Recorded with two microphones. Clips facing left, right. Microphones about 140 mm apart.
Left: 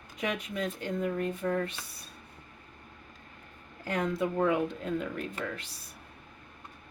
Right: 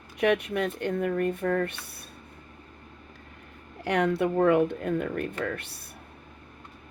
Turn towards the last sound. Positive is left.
turn(degrees=-60)  # may be behind; listen again after turning